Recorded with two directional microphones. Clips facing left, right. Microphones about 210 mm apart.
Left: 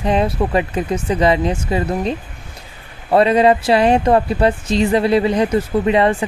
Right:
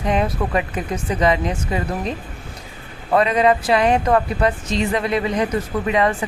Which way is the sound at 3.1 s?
30° left (ahead or behind).